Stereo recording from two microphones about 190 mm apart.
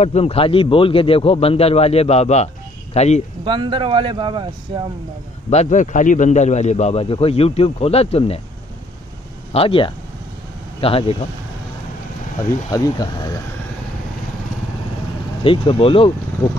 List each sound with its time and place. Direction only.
0.0 s speech: 35° left (ahead or behind)
3.4 s speech: 25° right (ahead or behind)
5.5 s speech: 40° left (ahead or behind)
9.5 s speech: 30° left (ahead or behind)
12.7 s speech: 20° left (ahead or behind)
15.4 s speech: 30° left (ahead or behind)